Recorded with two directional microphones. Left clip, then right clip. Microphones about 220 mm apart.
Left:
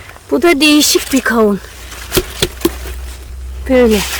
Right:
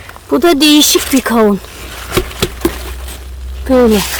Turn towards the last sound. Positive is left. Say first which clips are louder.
# right 1 dB
turn(degrees=-10)  # may be behind; listen again after turning